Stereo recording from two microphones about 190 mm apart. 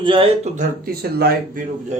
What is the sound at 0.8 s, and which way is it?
Speech, 55° right (ahead or behind).